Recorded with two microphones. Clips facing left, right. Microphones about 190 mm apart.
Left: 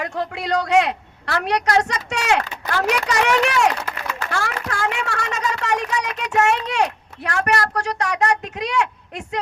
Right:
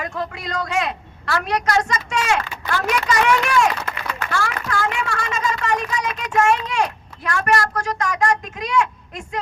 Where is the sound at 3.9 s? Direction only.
55° left (ahead or behind).